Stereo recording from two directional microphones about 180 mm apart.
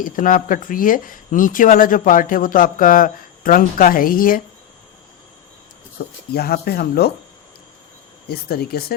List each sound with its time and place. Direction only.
0.0 s speech: 50° left (ahead or behind)
6.0 s a sound: 50° left (ahead or behind)
6.3 s speech: 60° left (ahead or behind)
8.3 s speech: 60° left (ahead or behind)